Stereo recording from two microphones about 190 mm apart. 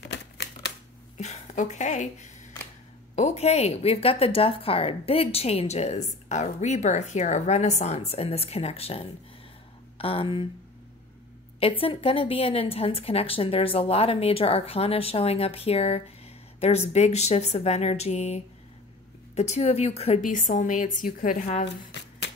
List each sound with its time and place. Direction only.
0.1 s typewriter: 65° left (ahead or behind)
1.1 s a woman's voice: 40° left (ahead or behind)
11.6 s a woman's voice: 30° left (ahead or behind)